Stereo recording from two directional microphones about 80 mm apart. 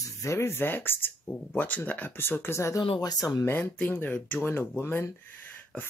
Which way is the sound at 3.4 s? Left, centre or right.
Left.